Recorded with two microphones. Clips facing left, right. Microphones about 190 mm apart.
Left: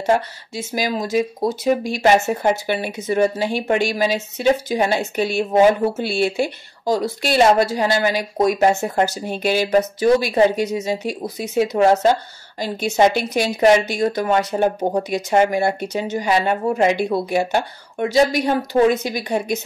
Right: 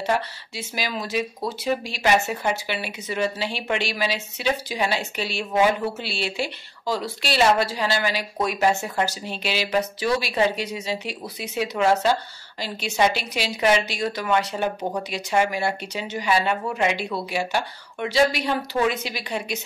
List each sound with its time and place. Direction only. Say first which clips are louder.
0.0 s a woman's voice: left 6 dB; 45° left (ahead or behind)